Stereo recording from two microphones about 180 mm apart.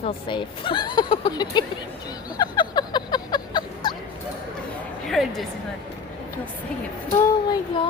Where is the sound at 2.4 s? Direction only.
25° left (ahead or behind).